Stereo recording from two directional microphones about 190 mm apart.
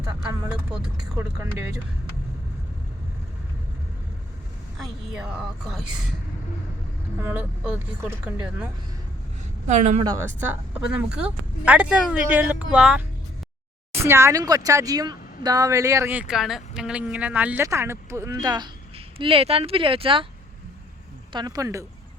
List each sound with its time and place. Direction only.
0.0 s speech: 10° right (ahead or behind)
4.8 s speech: 5° right (ahead or behind)
7.2 s speech: 10° right (ahead or behind)
9.6 s a woman's voice: 40° right (ahead or behind)
10.0 s speech: 15° right (ahead or behind)
14.0 s speech: 15° right (ahead or behind)
21.3 s speech: 20° right (ahead or behind)